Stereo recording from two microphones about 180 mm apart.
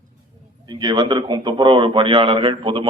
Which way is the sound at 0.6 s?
25° right (ahead or behind).